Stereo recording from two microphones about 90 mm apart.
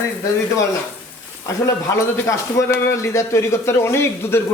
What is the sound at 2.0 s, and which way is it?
A man's voice, 35° left (ahead or behind).